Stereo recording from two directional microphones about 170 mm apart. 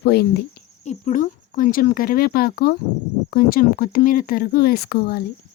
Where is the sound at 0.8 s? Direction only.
45° left (ahead or behind).